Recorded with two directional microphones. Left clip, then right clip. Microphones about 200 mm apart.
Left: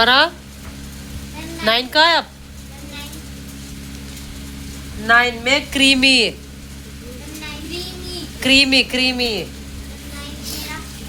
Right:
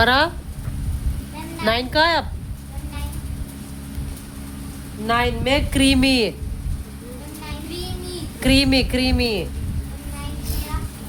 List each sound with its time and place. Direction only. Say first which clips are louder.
0.0 s speech: left 3 dB; 15° right (ahead or behind)
1.6 s speech: left 4 dB; 15° right (ahead or behind)
5.0 s a woman's voice: left 6 dB; 25° right (ahead or behind)
8.4 s a woman's voice: left 5 dB; 20° right (ahead or behind)